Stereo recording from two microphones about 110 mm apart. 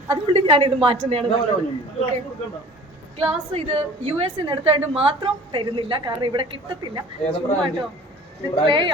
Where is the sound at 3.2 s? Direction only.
70° right (ahead or behind).